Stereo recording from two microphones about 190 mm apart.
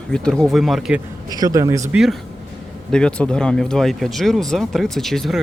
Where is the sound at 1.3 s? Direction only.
20° right (ahead or behind).